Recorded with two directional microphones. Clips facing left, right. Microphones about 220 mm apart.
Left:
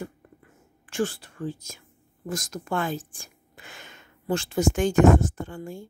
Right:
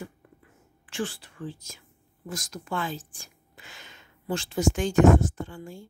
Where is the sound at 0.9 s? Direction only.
45° left (ahead or behind).